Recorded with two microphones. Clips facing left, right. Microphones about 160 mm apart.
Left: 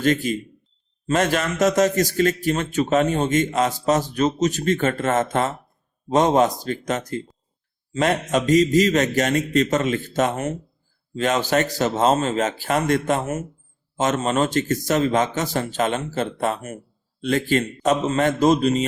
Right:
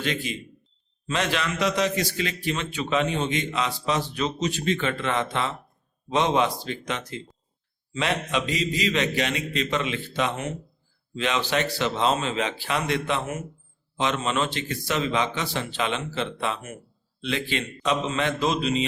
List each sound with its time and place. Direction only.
0.0 s a man's voice: 45° left (ahead or behind)